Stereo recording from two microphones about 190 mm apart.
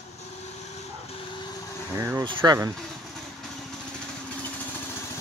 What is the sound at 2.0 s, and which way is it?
Speech, 15° right (ahead or behind).